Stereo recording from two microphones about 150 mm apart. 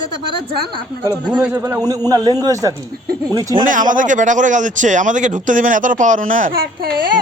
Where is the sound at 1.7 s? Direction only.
25° right (ahead or behind).